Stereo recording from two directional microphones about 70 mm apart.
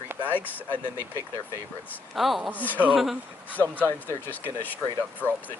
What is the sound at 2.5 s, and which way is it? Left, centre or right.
Speech, left.